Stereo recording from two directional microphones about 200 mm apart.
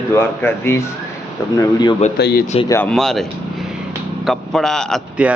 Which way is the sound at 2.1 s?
50° left (ahead or behind).